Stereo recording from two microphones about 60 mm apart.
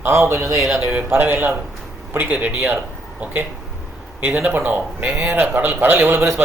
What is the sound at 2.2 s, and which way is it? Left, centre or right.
Speech, right.